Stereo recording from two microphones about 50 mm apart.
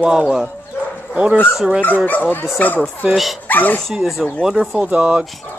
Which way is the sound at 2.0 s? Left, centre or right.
Left.